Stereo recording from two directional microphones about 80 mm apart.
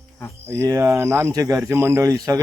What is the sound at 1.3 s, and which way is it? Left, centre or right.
Speech, right.